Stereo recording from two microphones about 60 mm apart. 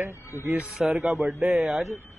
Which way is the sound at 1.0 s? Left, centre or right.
Right.